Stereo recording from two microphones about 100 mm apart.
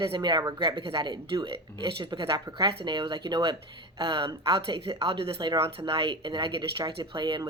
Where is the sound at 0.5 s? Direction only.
60° right (ahead or behind).